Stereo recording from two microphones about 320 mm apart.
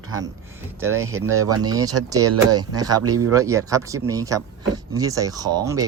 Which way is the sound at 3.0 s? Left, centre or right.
Right.